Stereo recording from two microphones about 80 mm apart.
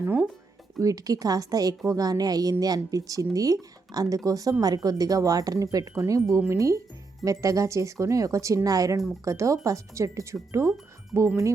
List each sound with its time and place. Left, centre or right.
0.8 s speech: right